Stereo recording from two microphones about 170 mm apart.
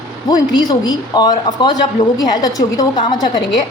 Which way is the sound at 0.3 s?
25° left (ahead or behind).